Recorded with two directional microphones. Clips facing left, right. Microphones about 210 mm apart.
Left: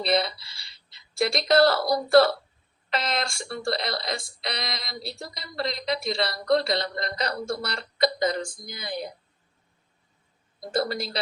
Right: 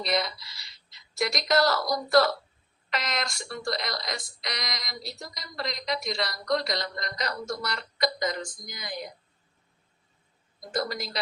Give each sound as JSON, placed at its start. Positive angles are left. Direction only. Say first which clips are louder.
{"t": 0.0, "sound": "speech", "louder": "left 4 dB", "side_deg": 30}
{"t": 10.6, "sound": "speech", "louder": "left 4 dB", "side_deg": 30}